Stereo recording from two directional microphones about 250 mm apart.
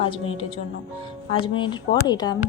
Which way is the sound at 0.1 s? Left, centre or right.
Left.